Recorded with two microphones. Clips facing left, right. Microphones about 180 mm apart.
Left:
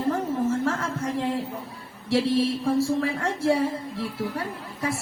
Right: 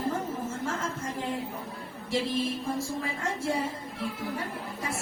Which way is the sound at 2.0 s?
75° left (ahead or behind).